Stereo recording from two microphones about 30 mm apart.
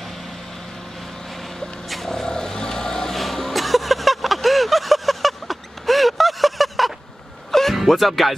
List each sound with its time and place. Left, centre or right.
1.3 s vehicle: centre
1.9 s a sound: centre
2.2 s vehicle: left
3.2 s a sound: centre
3.5 s vehicle: centre
7.7 s speech: centre